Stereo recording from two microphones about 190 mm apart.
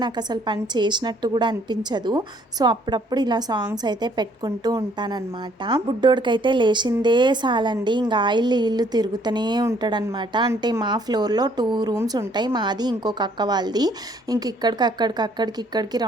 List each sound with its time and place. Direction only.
0.0 s speech: 20° right (ahead or behind)